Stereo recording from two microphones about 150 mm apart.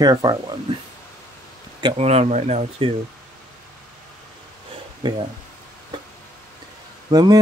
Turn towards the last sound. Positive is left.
turn(degrees=-25)  # may be behind; listen again after turning